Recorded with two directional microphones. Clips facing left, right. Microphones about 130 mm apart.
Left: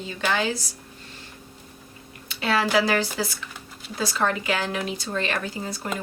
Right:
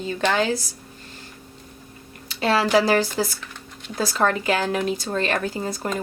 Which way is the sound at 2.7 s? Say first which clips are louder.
Right 4 dB; 40° right (ahead or behind).